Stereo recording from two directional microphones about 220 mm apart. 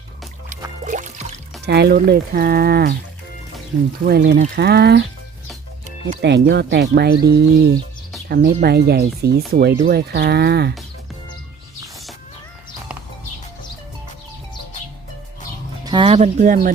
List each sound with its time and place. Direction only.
0.5 s music: 35° right (ahead or behind)
1.6 s speech: 50° right (ahead or behind)
4.0 s speech: 45° right (ahead or behind)
6.2 s speech: 50° right (ahead or behind)
15.8 s speech: 20° right (ahead or behind); by 16.7 s 35° right (ahead or behind)